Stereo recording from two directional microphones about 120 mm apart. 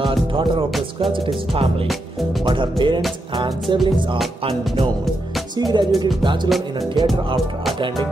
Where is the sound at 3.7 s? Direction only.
Centre (ahead or behind).